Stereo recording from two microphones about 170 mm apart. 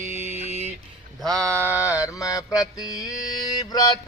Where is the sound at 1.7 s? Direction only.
15° left (ahead or behind).